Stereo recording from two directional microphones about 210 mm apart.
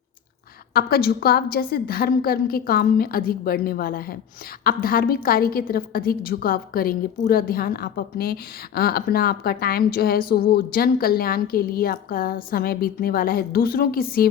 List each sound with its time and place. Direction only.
0.7 s a woman's voice: 45° left (ahead or behind)